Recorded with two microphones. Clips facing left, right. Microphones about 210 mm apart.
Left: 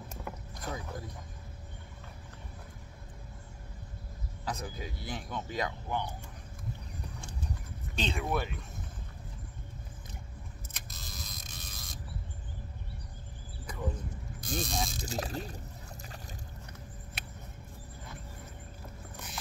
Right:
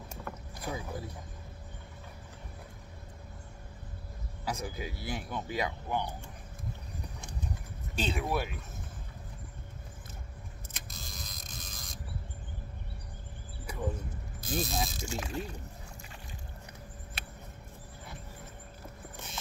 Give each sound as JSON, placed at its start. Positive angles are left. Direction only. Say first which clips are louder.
{"t": 0.6, "sound": "speech", "louder": "right 2 dB", "side_deg": -10}
{"t": 4.5, "sound": "speech", "louder": "right 2 dB", "side_deg": -10}
{"t": 7.9, "sound": "speech", "louder": "right 1 dB", "side_deg": -5}
{"t": 10.7, "sound": "camera", "louder": "right 1 dB", "side_deg": 0}
{"t": 13.7, "sound": "a sound", "louder": "right 2 dB", "side_deg": -10}
{"t": 14.4, "sound": "speech", "louder": "right 2 dB", "side_deg": -5}
{"t": 15.0, "sound": "speech", "louder": "even", "side_deg": 35}